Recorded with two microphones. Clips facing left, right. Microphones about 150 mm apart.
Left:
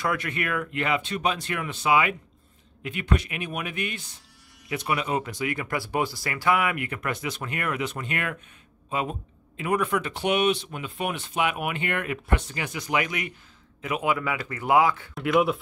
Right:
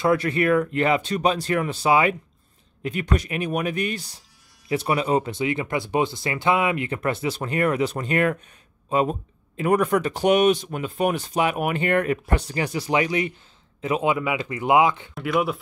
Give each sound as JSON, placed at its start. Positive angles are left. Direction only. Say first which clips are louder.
{"t": 0.0, "sound": "speech", "louder": "right 8 dB", "side_deg": -30}
{"t": 15.1, "sound": "speech", "louder": "left 1 dB", "side_deg": 0}